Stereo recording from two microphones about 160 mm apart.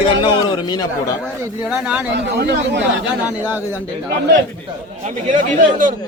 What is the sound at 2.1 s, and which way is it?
Speech, 90° right.